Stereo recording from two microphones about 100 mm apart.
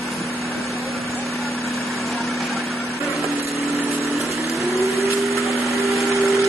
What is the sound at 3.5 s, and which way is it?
Vehicle, 30° right (ahead or behind).